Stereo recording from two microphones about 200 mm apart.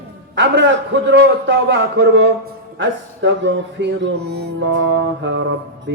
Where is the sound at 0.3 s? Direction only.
60° right (ahead or behind).